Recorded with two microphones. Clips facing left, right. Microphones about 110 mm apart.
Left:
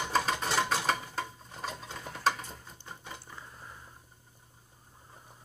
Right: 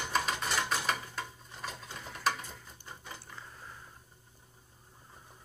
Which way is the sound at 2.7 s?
20° left (ahead or behind).